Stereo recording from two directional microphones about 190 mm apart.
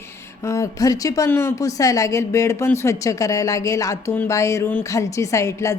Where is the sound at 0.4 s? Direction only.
15° left (ahead or behind).